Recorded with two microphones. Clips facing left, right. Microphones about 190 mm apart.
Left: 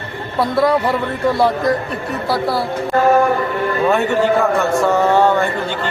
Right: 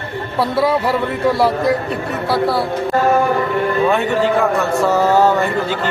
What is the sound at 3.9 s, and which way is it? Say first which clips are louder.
A man's voice: left 1 dB; centre (ahead or behind).